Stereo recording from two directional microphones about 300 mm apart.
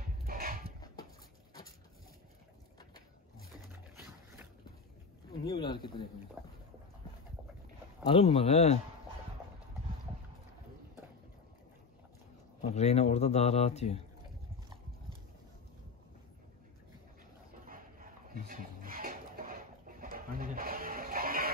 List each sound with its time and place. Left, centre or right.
0.2 s a sound: right
5.4 s speech: centre
6.4 s a sound: centre
8.0 s a man's voice: centre
12.6 s a man's voice: left
17.6 s dog: right